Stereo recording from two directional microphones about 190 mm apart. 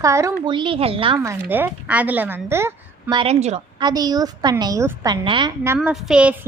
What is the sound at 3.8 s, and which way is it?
A woman's voice, 20° right (ahead or behind).